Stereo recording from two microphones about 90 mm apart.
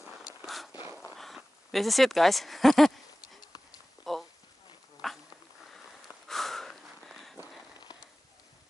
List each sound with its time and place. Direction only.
1.1 s speech: centre (ahead or behind)
4.0 s clip-clop: centre (ahead or behind)
5.0 s dog: centre (ahead or behind)
5.7 s a sound: centre (ahead or behind)